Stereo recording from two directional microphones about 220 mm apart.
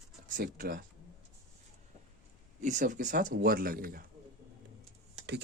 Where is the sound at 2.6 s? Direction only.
35° right (ahead or behind).